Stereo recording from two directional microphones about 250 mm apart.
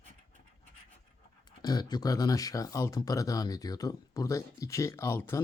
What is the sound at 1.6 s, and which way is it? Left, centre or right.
Speech, centre.